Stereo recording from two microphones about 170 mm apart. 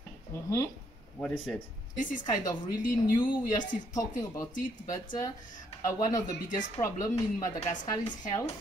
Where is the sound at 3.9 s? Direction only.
20° left (ahead or behind).